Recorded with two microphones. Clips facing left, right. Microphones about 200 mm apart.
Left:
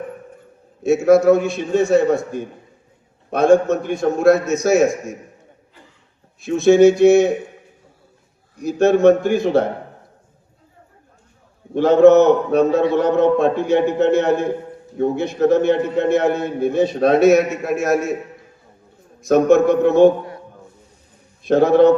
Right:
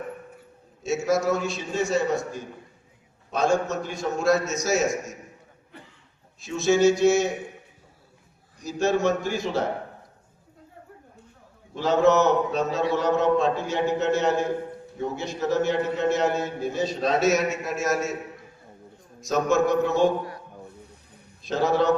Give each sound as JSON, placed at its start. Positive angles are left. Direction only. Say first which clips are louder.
{"t": 0.8, "sound": "a man's voice", "louder": "left 11 dB", "side_deg": 55}
{"t": 6.4, "sound": "a man's voice", "louder": "left 9 dB", "side_deg": 55}
{"t": 8.5, "sound": "a man's voice", "louder": "left 9 dB", "side_deg": 55}
{"t": 11.7, "sound": "a man's voice", "louder": "left 10 dB", "side_deg": 55}
{"t": 19.2, "sound": "a man's voice", "louder": "left 9 dB", "side_deg": 55}
{"t": 21.4, "sound": "a man's voice", "louder": "left 10 dB", "side_deg": 60}